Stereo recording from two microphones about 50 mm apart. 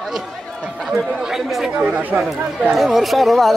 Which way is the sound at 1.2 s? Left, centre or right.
Centre.